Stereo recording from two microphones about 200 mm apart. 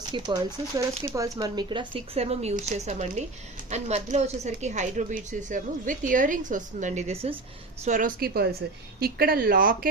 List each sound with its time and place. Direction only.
0.1 s a woman's voice: 20° right (ahead or behind); by 9.9 s 45° right (ahead or behind)